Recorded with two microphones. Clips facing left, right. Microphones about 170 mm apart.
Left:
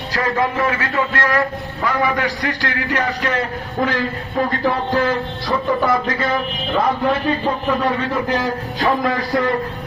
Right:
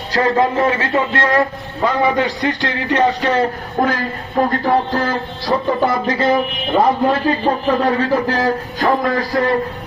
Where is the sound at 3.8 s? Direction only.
45° right (ahead or behind).